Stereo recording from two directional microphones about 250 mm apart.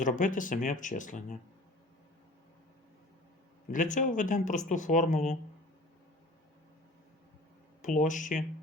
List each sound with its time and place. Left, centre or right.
0.0 s speech: left
3.7 s speech: left
7.8 s speech: left